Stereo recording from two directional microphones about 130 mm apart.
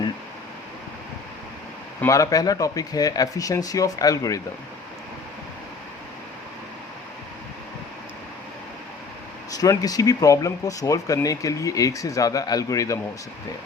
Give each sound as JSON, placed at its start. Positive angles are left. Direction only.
{"t": 2.0, "sound": "speech", "side_deg": 25}
{"t": 9.5, "sound": "speech", "side_deg": 30}